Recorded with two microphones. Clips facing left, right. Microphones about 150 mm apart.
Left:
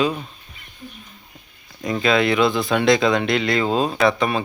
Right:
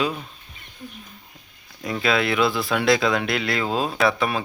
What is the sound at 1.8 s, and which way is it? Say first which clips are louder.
Speech: left 4 dB; centre (ahead or behind).